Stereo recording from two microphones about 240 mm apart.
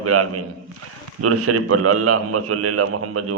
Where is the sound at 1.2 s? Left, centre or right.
Right.